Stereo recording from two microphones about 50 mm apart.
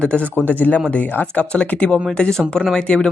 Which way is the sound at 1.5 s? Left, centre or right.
Left.